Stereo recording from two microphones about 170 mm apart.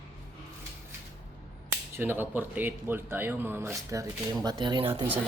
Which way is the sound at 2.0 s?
10° right (ahead or behind).